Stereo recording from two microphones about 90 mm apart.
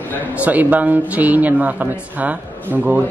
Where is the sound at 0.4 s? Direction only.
20° right (ahead or behind).